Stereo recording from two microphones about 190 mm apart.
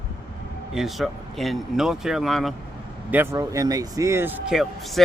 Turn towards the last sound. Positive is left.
turn(degrees=-5)  # may be behind; listen again after turning